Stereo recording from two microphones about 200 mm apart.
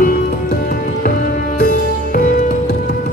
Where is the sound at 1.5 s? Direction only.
40° left (ahead or behind).